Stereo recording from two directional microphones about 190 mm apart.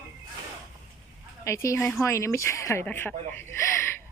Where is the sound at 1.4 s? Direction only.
15° left (ahead or behind).